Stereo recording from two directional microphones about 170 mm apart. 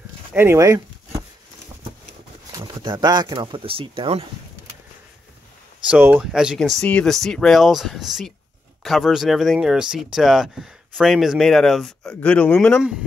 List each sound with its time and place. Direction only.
0.3 s speech: 15° right (ahead or behind)
2.5 s speech: 25° right (ahead or behind)
5.9 s speech: 10° right (ahead or behind); by 12.8 s 5° left (ahead or behind)